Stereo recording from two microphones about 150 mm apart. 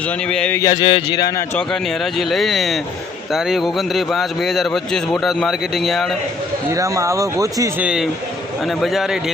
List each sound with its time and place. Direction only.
0.3 s speech: 5° left (ahead or behind)
0.6 s speech: 30° left (ahead or behind)
1.5 s a man's voice: 5° left (ahead or behind)
6.7 s speech: 20° right (ahead or behind)
7.8 s a man's voice: 5° right (ahead or behind)